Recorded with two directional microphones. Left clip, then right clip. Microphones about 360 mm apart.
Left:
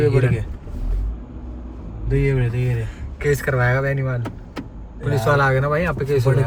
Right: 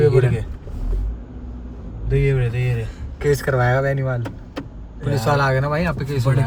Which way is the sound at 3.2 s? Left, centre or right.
Centre.